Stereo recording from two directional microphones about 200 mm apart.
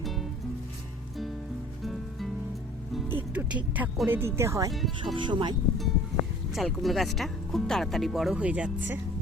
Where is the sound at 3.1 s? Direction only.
10° right (ahead or behind); by 5.5 s 25° right (ahead or behind).